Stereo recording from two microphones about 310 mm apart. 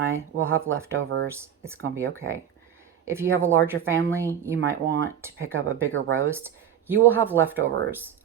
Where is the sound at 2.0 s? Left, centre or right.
Right.